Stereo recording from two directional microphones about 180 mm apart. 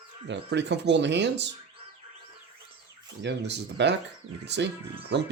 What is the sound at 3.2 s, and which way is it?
Speech, 70° right (ahead or behind).